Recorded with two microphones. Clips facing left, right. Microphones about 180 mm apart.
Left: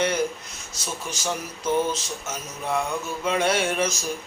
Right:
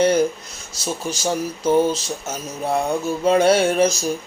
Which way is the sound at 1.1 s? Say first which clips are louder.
Right 6 dB; 35° right (ahead or behind).